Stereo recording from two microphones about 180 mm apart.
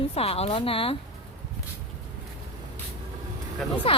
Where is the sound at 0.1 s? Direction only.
35° left (ahead or behind).